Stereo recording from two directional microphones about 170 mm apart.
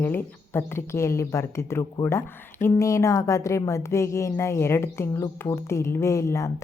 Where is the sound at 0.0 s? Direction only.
10° left (ahead or behind).